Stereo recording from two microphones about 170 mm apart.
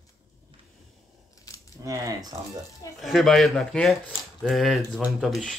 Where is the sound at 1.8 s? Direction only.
20° right (ahead or behind).